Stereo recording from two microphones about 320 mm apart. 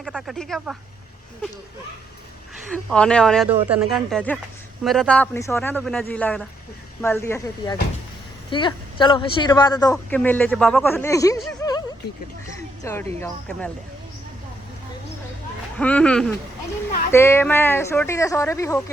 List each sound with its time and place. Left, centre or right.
0.0 s speech: centre
2.7 s speech: centre
12.5 s a sound: centre
13.1 s speech: centre
15.8 s speech: centre